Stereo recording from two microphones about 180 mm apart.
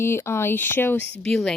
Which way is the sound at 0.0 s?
15° left (ahead or behind).